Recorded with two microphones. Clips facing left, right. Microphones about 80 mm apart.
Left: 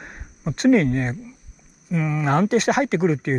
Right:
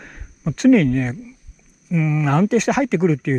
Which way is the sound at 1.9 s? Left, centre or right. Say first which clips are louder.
Right 3 dB; centre.